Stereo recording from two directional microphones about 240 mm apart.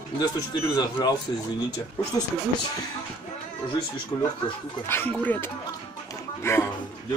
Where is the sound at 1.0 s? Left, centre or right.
Centre.